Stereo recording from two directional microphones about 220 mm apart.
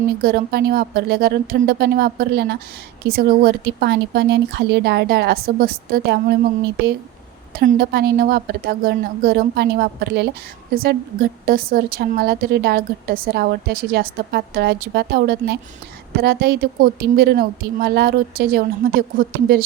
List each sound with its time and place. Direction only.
0.2 s a woman's voice: 40° right (ahead or behind)
7.5 s a woman's voice: 45° right (ahead or behind)